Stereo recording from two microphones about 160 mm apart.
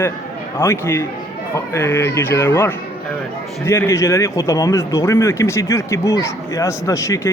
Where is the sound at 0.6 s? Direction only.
15° left (ahead or behind).